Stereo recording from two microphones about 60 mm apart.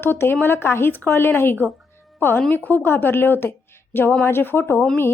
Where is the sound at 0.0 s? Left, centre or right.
Left.